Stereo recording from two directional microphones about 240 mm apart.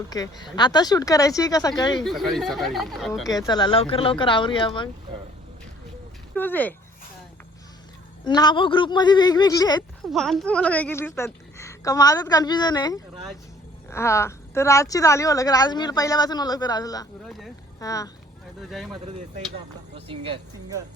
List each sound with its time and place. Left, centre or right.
0.1 s a woman's voice: centre
2.0 s speech: centre
3.2 s speech: centre
6.3 s a woman's voice: centre
8.2 s a woman's voice: centre
10.1 s a woman's voice: centre
17.2 s speech: centre
17.7 s speech: centre
20.1 s speech: right